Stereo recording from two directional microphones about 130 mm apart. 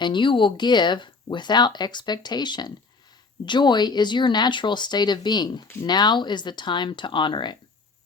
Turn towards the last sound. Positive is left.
turn(degrees=35)  # may be behind; listen again after turning